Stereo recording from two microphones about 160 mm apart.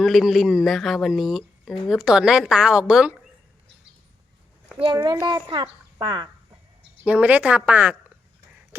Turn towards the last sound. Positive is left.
turn(degrees=-10)  # may be behind; listen again after turning